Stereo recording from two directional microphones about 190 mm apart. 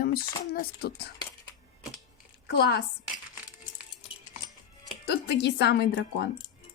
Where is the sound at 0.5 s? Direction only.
55° left (ahead or behind).